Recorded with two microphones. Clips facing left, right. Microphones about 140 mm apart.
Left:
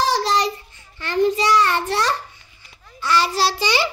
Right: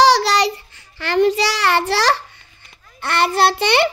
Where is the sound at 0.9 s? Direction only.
75° right (ahead or behind).